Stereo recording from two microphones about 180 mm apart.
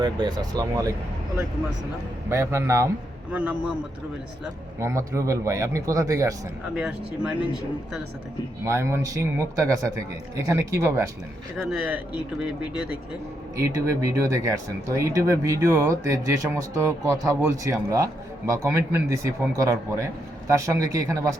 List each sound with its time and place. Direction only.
0.0 s speech: 25° right (ahead or behind)
2.3 s speech: 15° right (ahead or behind)
4.8 s speech: 15° right (ahead or behind)
6.7 s speech: 5° right (ahead or behind)
8.6 s speech: 15° right (ahead or behind)
11.5 s speech: 5° right (ahead or behind)
13.6 s speech: 15° right (ahead or behind)